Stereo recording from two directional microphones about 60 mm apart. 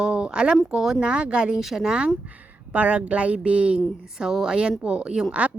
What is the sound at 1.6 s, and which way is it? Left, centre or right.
Speech, centre.